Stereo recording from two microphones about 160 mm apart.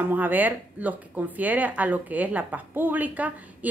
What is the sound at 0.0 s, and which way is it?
Speech, 10° right (ahead or behind).